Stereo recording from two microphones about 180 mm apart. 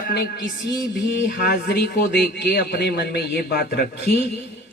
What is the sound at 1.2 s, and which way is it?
Speech, 55° left (ahead or behind).